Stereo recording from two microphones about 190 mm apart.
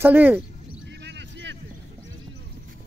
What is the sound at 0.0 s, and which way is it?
Speech, 10° right (ahead or behind).